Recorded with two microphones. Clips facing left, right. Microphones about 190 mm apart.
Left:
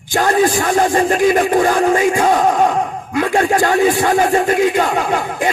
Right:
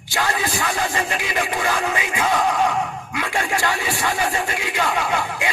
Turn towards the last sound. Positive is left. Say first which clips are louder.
# left 6 dB
turn(degrees=50)  # may be behind; listen again after turning